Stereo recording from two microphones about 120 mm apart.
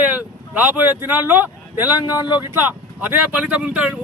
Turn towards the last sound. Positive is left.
turn(degrees=-10)  # may be behind; listen again after turning